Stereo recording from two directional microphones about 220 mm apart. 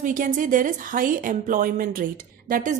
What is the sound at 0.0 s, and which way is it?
A woman's voice, 35° right (ahead or behind).